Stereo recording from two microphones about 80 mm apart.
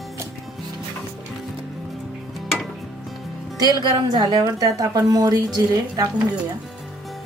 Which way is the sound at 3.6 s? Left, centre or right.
Right.